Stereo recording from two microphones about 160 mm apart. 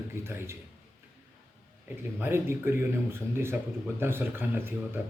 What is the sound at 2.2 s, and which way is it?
Speech, 15° right (ahead or behind).